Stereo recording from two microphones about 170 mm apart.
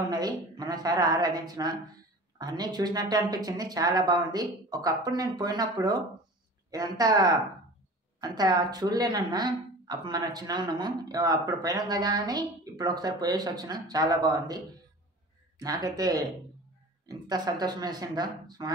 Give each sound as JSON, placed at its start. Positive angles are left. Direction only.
{"t": 0.1, "sound": "speech", "side_deg": -25}
{"t": 15.6, "sound": "speech", "side_deg": -20}